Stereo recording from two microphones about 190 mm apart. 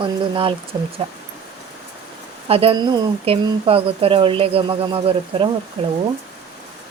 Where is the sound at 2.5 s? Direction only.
30° right (ahead or behind).